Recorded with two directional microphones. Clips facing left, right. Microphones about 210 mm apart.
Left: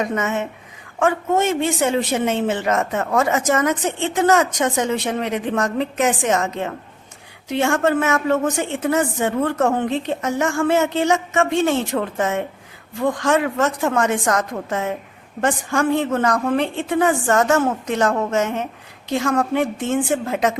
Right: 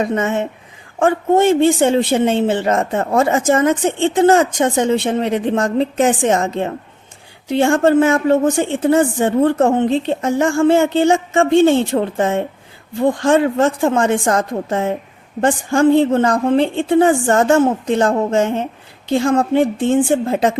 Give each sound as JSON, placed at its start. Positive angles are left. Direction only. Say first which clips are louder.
{"t": 0.0, "sound": "a man's voice", "louder": "right 4 dB", "side_deg": -30}